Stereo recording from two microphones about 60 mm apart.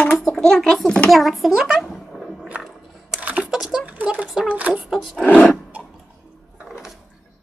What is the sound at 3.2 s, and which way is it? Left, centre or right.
Computer keyboard, right.